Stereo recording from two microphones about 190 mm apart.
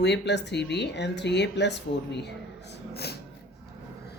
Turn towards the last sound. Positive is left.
turn(degrees=60)  # may be behind; listen again after turning